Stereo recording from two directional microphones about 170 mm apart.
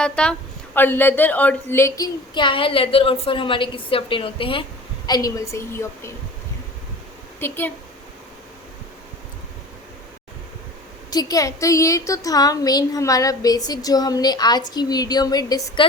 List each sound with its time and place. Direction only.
0.0 s a woman's voice: 5° left (ahead or behind)
2.3 s a woman's voice: 30° left (ahead or behind)
7.3 s a woman's voice: 15° left (ahead or behind)
11.1 s a woman's voice: 20° left (ahead or behind)